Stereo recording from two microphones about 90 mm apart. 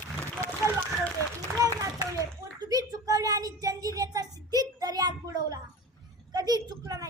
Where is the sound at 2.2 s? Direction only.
40° right (ahead or behind).